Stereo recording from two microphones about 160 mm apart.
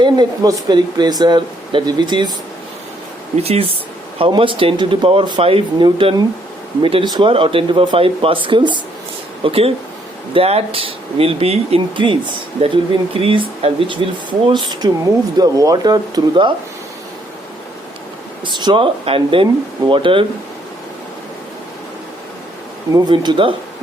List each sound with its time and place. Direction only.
0.0 s speech: 30° right (ahead or behind)
3.3 s speech: 40° right (ahead or behind)
18.4 s speech: 30° right (ahead or behind)
23.0 s speech: 25° right (ahead or behind)